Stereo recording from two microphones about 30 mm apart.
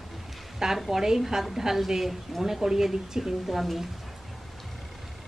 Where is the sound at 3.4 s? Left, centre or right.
Centre.